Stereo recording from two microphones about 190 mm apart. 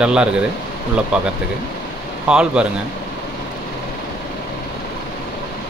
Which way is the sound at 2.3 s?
5° right (ahead or behind).